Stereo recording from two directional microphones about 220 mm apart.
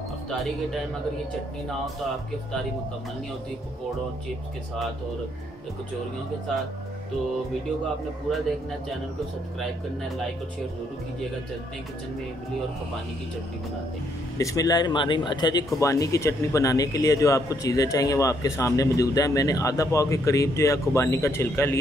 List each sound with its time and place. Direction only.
9.6 s speech: centre (ahead or behind)
14.4 s speech: 15° left (ahead or behind)